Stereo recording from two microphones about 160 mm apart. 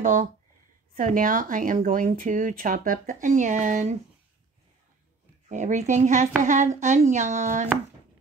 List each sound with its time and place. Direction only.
0.0 s speech: 55° right (ahead or behind)
5.5 s speech: 50° right (ahead or behind)